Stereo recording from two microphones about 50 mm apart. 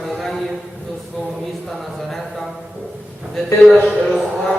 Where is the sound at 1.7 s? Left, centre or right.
Centre.